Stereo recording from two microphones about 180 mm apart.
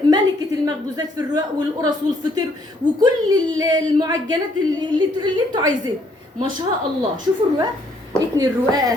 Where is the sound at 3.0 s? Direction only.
20° right (ahead or behind).